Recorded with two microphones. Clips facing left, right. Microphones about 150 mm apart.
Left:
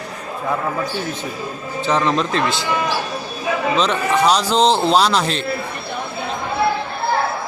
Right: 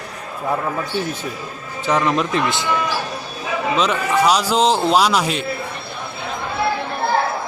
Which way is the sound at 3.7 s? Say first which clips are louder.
Right 1 dB; 5° right (ahead or behind).